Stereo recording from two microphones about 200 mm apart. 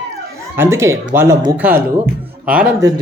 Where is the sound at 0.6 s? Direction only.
15° right (ahead or behind).